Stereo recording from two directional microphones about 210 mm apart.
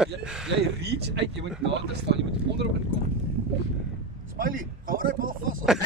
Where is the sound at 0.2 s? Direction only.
5° right (ahead or behind).